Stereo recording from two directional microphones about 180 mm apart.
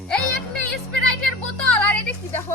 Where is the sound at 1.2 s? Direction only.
5° left (ahead or behind).